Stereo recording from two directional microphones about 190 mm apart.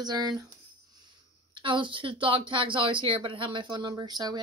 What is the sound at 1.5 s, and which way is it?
Speech, 25° right (ahead or behind).